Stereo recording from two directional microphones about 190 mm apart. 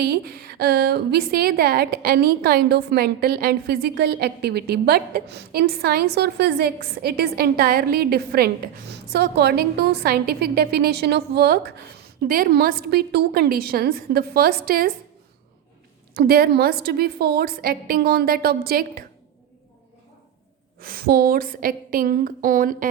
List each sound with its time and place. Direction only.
0.0 s a woman's voice: 55° right (ahead or behind)
16.1 s a woman's voice: 55° right (ahead or behind)
20.7 s a woman's voice: 50° right (ahead or behind)